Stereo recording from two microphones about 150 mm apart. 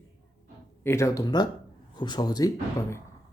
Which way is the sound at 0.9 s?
20° left (ahead or behind).